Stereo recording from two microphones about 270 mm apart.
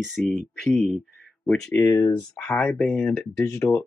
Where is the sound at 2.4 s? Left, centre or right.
Centre.